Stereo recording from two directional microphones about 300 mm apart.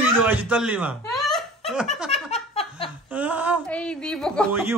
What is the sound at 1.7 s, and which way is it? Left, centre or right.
Laughter, centre.